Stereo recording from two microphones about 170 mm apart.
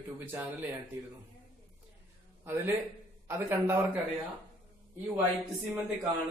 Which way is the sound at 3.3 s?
15° right (ahead or behind).